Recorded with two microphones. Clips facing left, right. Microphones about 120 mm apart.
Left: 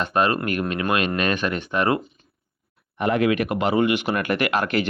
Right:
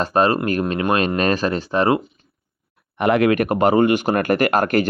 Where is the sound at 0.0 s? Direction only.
35° right (ahead or behind).